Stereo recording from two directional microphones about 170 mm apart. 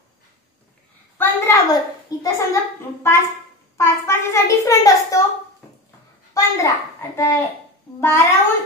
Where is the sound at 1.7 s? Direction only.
20° left (ahead or behind).